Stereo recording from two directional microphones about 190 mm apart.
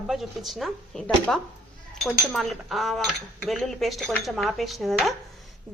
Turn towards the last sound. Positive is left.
turn(degrees=5)  # may be behind; listen again after turning